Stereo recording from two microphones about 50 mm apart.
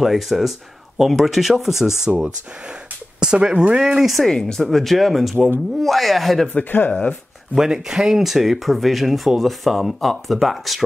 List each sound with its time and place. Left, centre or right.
0.0 s speech: centre
3.4 s speech: centre
4.0 s speech: centre
4.3 s speech: centre
6.5 s speech: left
6.9 s speech: left
7.5 s speech: centre